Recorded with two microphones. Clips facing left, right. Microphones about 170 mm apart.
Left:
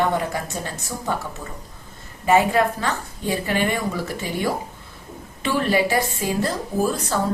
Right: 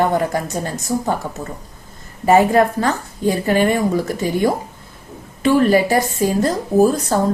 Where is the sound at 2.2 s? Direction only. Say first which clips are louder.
Right 5 dB; 40° right (ahead or behind).